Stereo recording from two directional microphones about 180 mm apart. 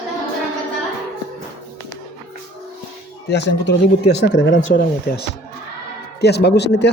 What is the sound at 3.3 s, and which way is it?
A man's voice, 70° left (ahead or behind).